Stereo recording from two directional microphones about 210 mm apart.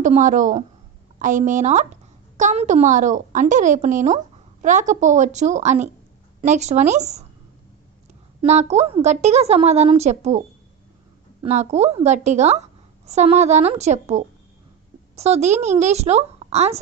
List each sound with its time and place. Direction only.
0.0 s a woman's voice: 35° right (ahead or behind)
8.4 s a woman's voice: 30° right (ahead or behind)
11.4 s a woman's voice: 30° right (ahead or behind)